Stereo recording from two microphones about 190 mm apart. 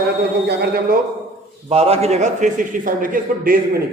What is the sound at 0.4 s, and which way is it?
Speech, 55° right (ahead or behind).